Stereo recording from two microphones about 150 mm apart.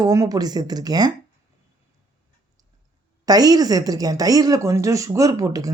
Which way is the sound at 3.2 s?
25° right (ahead or behind).